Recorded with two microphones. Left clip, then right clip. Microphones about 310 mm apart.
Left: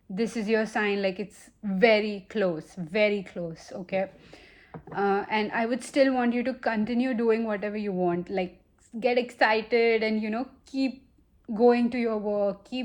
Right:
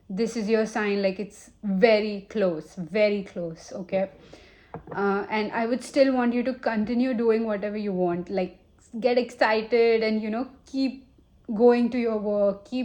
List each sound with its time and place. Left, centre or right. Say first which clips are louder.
0.1 s a woman's voice: right 2 dB; left